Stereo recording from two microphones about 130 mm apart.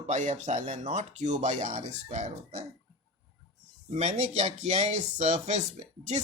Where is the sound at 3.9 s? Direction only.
55° right (ahead or behind).